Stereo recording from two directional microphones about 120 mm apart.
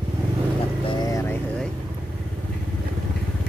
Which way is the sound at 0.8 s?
35° left (ahead or behind).